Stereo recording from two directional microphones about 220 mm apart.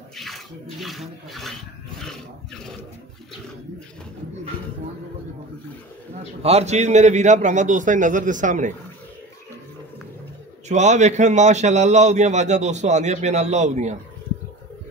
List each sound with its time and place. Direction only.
0.1 s bathtub: centre (ahead or behind)
6.4 s a man's voice: 30° right (ahead or behind)
10.7 s a man's voice: 30° right (ahead or behind)